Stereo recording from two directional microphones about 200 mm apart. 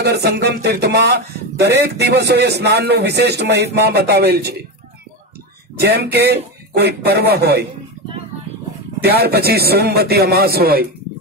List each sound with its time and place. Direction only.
0.0 s a man's voice: 55° right (ahead or behind)
5.8 s a man's voice: 55° right (ahead or behind)
9.0 s a man's voice: 55° right (ahead or behind)